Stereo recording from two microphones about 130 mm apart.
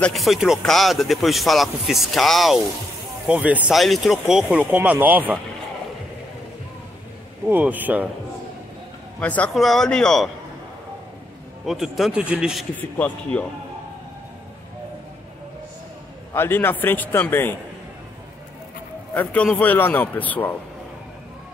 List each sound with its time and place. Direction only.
0.0 s speech: centre (ahead or behind)
3.3 s speech: 10° right (ahead or behind)
3.7 s speech: centre (ahead or behind)
7.4 s speech: 15° right (ahead or behind)
9.2 s a man's voice: 10° left (ahead or behind)
9.5 s speech: centre (ahead or behind)
11.6 s speech: centre (ahead or behind)
12.9 s a man's voice: 10° left (ahead or behind)
16.3 s a man's voice: 15° left (ahead or behind)
19.1 s a man's voice: 10° left (ahead or behind)